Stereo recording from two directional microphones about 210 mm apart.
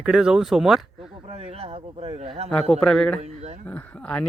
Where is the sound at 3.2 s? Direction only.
30° right (ahead or behind).